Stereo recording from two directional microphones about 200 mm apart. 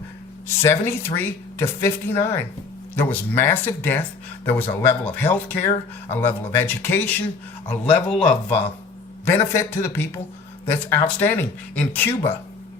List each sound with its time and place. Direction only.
0.4 s speech: 10° left (ahead or behind)